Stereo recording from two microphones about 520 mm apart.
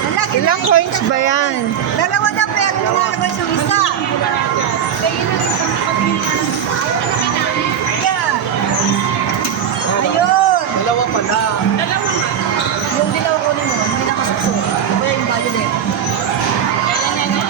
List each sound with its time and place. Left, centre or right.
0.4 s speech: left